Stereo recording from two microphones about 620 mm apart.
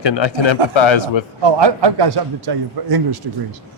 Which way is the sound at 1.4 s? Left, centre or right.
Right.